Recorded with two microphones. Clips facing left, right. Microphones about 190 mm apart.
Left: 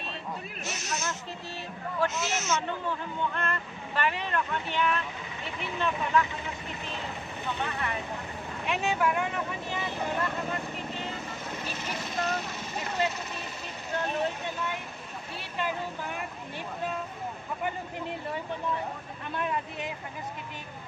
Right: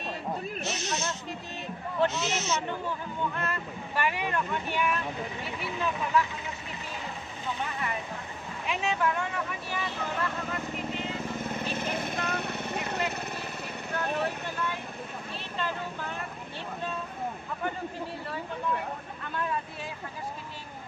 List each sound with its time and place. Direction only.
0.7 s snake: 30° right (ahead or behind)
2.0 s speech: 35° right (ahead or behind)
3.3 s speech: 10° right (ahead or behind)
8.6 s speech: 5° left (ahead or behind); by 9.8 s 20° left (ahead or behind)
11.7 s vehicle: 55° right (ahead or behind)
15.5 s speech: 15° left (ahead or behind)
19.3 s speech: 20° left (ahead or behind)